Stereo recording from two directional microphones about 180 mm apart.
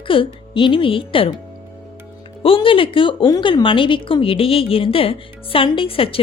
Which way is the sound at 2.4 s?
30° left (ahead or behind).